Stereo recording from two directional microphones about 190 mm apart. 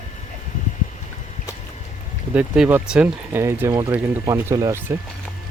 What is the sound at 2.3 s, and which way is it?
Speech, 10° right (ahead or behind).